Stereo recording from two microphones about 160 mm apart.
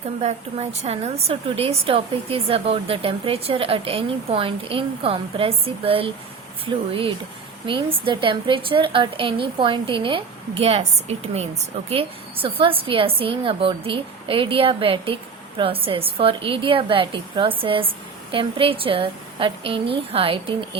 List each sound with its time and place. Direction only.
0.2 s a woman's voice: 45° right (ahead or behind)
7.7 s a woman's voice: 30° right (ahead or behind)